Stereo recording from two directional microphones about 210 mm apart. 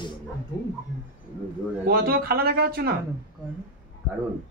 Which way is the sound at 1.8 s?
45° right (ahead or behind).